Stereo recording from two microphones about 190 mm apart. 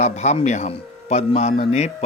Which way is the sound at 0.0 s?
35° left (ahead or behind).